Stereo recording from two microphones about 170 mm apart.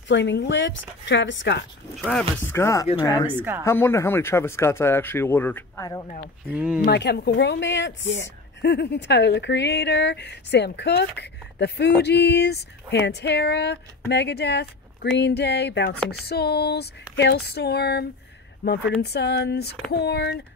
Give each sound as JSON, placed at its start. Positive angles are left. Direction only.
{"t": 0.1, "sound": "speech", "side_deg": 90}
{"t": 2.0, "sound": "speech", "side_deg": 5}
{"t": 2.6, "sound": "speech", "side_deg": 20}
{"t": 3.3, "sound": "speech", "side_deg": -10}
{"t": 3.6, "sound": "speech", "side_deg": 15}
{"t": 6.5, "sound": "speech", "side_deg": -5}
{"t": 6.8, "sound": "speech", "side_deg": 75}
{"t": 16.1, "sound": "a sound", "side_deg": 70}